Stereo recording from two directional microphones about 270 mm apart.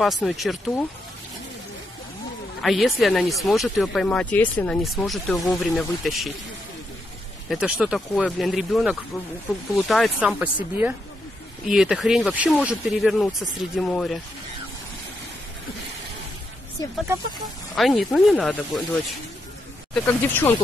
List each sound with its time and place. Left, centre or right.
0.0 s speech: centre
2.6 s speech: centre
7.4 s speech: centre
17.7 s speech: centre